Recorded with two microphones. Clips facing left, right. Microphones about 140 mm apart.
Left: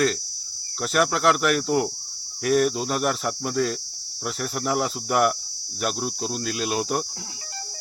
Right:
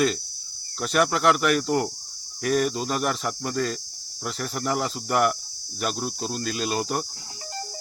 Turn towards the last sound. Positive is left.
turn(degrees=5)  # may be behind; listen again after turning